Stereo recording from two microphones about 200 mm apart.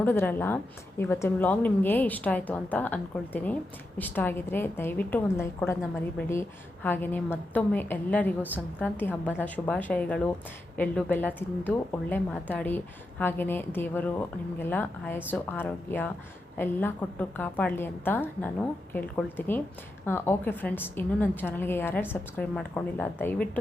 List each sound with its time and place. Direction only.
0.0 s a woman's voice: 10° left (ahead or behind)
6.8 s a woman's voice: 10° left (ahead or behind)